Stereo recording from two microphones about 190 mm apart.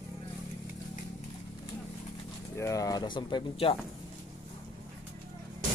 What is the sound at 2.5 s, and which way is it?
Speech, 15° left (ahead or behind).